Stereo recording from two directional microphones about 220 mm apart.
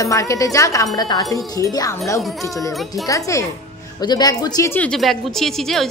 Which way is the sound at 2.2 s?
Centre (ahead or behind).